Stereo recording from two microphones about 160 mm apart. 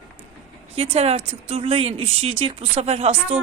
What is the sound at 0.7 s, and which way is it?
Speech, 40° right (ahead or behind).